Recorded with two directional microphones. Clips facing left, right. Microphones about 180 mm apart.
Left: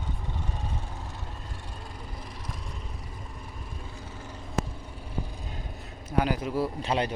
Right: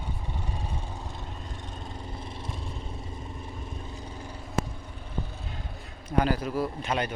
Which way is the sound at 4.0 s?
15° right (ahead or behind).